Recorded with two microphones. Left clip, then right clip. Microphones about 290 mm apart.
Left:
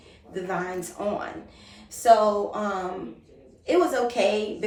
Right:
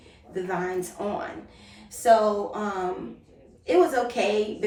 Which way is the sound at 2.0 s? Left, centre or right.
Centre.